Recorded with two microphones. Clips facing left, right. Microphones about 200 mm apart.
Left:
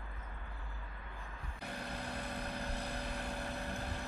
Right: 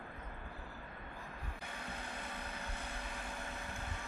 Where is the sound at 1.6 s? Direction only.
35° left (ahead or behind).